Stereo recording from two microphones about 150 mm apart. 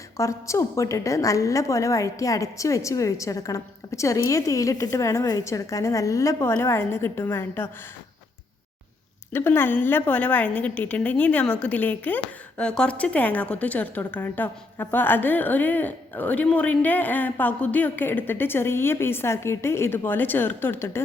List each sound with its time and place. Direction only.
0.2 s a woman's voice: 20° left (ahead or behind)
9.3 s a woman's voice: 15° left (ahead or behind)